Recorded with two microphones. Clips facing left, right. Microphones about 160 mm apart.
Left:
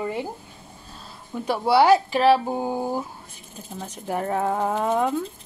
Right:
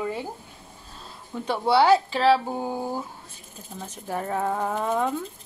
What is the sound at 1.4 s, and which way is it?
A woman's voice, 10° left (ahead or behind).